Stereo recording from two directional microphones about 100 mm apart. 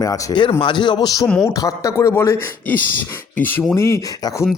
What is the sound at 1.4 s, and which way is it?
A man's voice, 35° left (ahead or behind).